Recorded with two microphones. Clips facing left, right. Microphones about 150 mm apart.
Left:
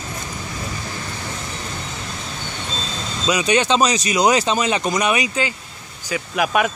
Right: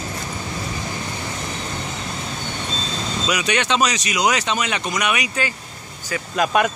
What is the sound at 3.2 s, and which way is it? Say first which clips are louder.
Speech: left 5 dB; 25° left (ahead or behind).